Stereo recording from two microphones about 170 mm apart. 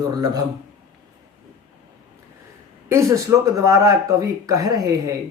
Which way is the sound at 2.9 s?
15° right (ahead or behind).